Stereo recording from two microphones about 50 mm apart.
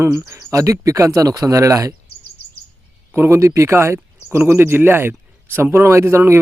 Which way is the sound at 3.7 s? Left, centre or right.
Right.